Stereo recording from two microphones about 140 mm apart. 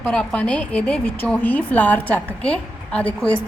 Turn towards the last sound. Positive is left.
turn(degrees=10)  # may be behind; listen again after turning